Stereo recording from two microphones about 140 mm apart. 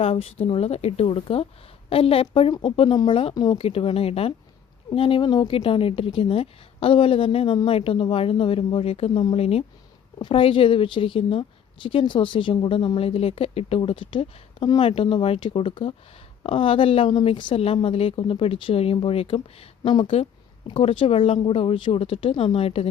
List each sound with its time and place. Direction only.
0.0 s a woman's voice: 45° left (ahead or behind); by 3.6 s 30° left (ahead or behind)
3.6 s a woman's voice: 45° left (ahead or behind)